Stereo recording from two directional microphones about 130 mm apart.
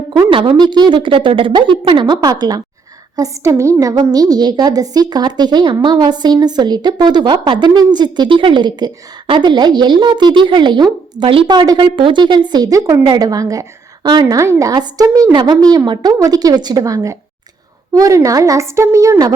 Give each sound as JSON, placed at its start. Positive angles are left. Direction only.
{"t": 0.3, "sound": "a woman's voice", "side_deg": -40}